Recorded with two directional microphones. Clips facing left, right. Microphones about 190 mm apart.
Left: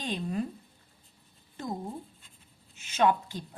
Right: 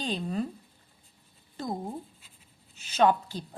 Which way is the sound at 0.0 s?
35° right (ahead or behind).